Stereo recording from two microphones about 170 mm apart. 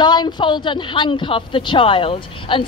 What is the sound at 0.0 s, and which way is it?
Speech, 25° left (ahead or behind).